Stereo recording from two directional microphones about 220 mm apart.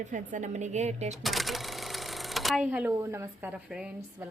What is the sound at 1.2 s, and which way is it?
Speech, centre (ahead or behind).